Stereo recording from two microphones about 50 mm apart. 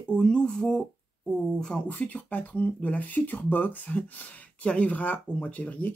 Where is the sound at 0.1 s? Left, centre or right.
Centre.